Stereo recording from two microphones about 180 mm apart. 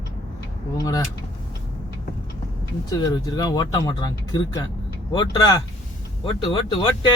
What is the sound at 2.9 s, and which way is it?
Speech, 20° left (ahead or behind).